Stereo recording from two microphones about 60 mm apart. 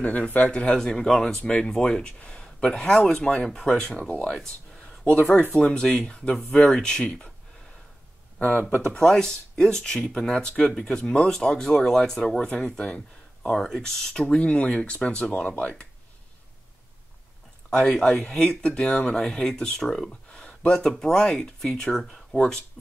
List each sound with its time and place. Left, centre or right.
0.5 s speech: left
0.7 s speech: centre
4.1 s speech: left
8.4 s speech: left
8.8 s speech: centre
17.6 s speech: centre